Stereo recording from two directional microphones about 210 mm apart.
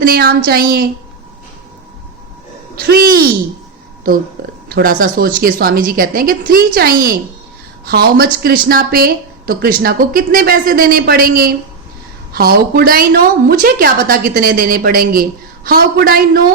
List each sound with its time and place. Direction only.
0.0 s speech: 45° right (ahead or behind)
2.7 s a woman's voice: 45° right (ahead or behind)
4.7 s a woman's voice: 45° right (ahead or behind)